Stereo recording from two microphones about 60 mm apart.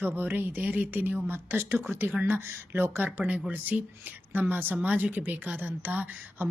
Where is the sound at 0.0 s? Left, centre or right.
Right.